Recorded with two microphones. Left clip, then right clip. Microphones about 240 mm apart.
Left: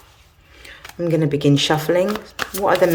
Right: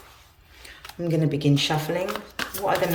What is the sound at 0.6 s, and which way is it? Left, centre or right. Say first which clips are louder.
Speech: left 7 dB; centre.